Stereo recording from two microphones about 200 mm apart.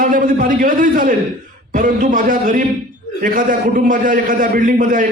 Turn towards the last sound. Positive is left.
turn(degrees=-45)  # may be behind; listen again after turning